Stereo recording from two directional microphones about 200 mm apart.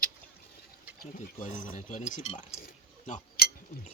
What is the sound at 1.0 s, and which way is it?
Speech, 40° left (ahead or behind).